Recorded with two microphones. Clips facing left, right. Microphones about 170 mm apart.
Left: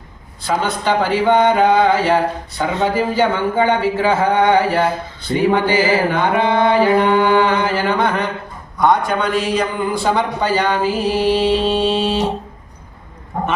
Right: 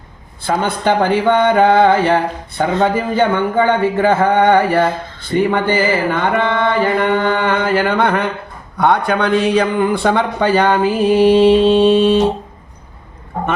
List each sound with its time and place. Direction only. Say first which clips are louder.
0.4 s a man's voice: right 2 dB; 55° right (ahead or behind)